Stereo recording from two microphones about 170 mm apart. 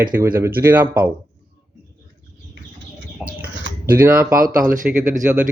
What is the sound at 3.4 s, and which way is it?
Bird, 75° right (ahead or behind).